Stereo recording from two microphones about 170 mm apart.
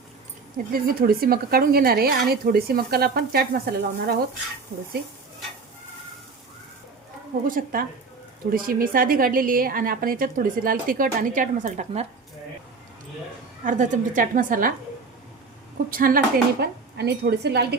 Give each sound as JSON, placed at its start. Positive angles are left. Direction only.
{"t": 0.7, "sound": "a woman's voice", "side_deg": -60}
{"t": 7.4, "sound": "a woman's voice", "side_deg": -55}
{"t": 13.7, "sound": "a woman's voice", "side_deg": -45}
{"t": 15.9, "sound": "speech", "side_deg": -55}